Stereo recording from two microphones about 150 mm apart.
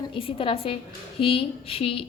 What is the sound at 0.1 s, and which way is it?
A woman's voice, 35° left (ahead or behind).